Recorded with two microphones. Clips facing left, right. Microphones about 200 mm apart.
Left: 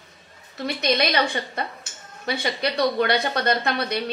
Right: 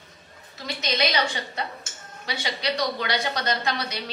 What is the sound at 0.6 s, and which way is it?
A woman's voice, 60° left (ahead or behind).